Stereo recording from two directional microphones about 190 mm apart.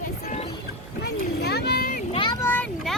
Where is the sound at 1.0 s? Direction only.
60° left (ahead or behind).